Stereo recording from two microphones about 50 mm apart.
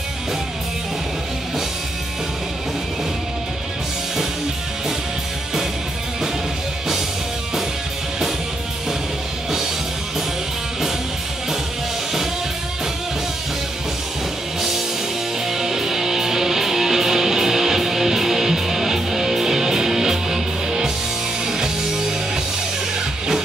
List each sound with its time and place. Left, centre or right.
15.4 s music: centre